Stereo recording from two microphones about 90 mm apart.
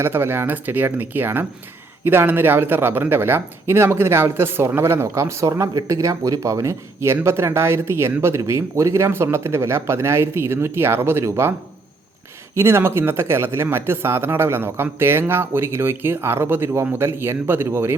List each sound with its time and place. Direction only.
0.0 s speech: 25° right (ahead or behind)
12.5 s speech: 30° right (ahead or behind)